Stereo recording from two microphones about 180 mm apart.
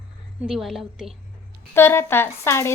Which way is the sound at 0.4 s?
Centre (ahead or behind).